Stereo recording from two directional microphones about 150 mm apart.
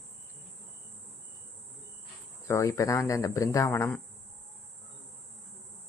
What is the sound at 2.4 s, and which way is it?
Speech, 20° left (ahead or behind).